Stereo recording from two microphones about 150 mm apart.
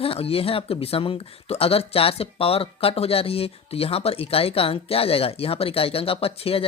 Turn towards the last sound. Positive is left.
turn(degrees=40)  # may be behind; listen again after turning